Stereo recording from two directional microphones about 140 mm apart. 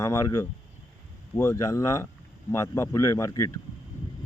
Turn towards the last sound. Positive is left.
turn(degrees=25)  # may be behind; listen again after turning